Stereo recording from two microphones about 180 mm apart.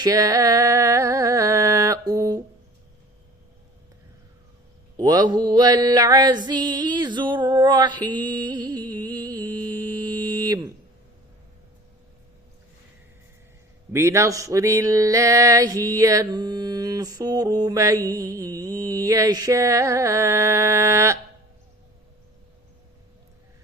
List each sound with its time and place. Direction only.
0.0 s music: 20° right (ahead or behind)
4.9 s mantra: 20° right (ahead or behind)
13.9 s a sound: 15° right (ahead or behind)